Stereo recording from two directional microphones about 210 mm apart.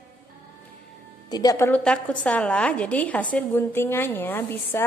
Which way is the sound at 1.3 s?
15° left (ahead or behind).